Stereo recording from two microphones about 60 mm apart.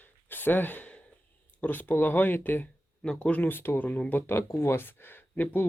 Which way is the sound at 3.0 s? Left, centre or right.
Centre.